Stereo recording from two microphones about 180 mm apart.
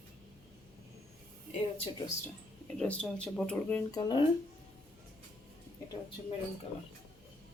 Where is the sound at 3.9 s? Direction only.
25° left (ahead or behind).